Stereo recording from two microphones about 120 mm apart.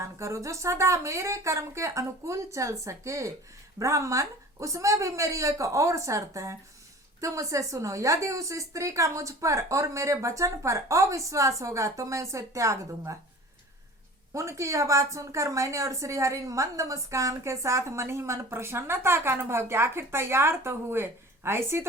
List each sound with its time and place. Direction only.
0.0 s a woman's voice: 25° right (ahead or behind)
14.3 s a woman's voice: 25° right (ahead or behind)